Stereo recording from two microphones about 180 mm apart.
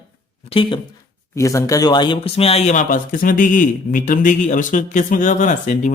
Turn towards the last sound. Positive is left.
turn(degrees=45)  # may be behind; listen again after turning